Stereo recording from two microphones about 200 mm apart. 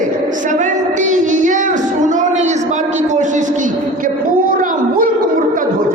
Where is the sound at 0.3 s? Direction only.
40° right (ahead or behind).